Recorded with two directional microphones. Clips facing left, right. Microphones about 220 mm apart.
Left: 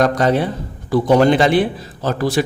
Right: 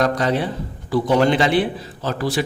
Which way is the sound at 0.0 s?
45° left (ahead or behind).